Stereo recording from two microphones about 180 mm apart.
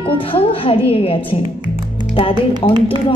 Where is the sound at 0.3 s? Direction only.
30° left (ahead or behind).